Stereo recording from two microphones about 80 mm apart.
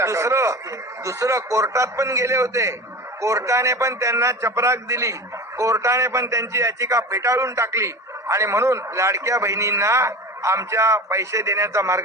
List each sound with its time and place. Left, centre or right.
0.0 s a man's voice: right